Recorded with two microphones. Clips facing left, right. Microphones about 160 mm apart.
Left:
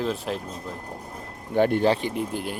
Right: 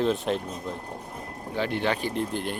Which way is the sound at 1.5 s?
50° left (ahead or behind).